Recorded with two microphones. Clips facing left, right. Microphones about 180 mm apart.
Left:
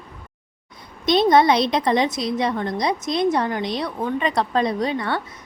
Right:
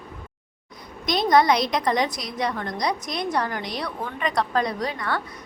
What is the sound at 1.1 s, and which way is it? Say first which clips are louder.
A woman's voice: left 3 dB; 25° left (ahead or behind).